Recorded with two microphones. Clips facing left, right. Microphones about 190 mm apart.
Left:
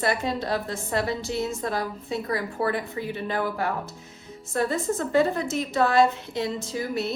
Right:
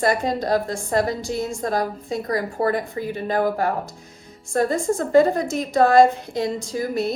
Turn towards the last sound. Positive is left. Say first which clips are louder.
# right 4 dB
turn(degrees=-40)  # may be behind; listen again after turning